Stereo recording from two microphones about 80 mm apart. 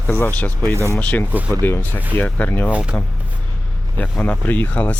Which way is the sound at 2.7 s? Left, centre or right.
Centre.